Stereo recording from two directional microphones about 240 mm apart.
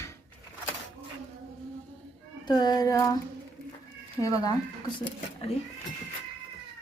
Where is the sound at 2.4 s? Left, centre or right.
Centre.